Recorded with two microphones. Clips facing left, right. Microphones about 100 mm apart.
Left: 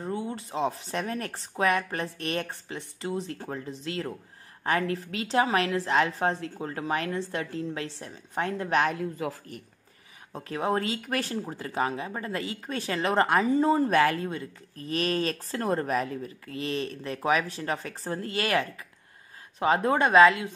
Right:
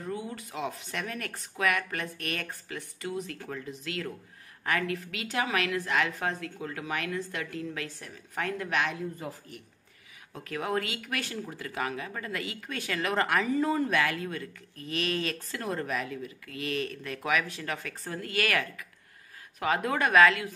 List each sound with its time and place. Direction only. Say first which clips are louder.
0.0 s speech: left 4 dB; 30° left (ahead or behind)
9.2 s a man's voice: left 7 dB; 90° left
10.3 s speech: left 3 dB; 30° left (ahead or behind)